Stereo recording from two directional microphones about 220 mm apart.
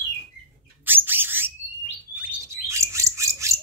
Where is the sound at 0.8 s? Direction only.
10° right (ahead or behind).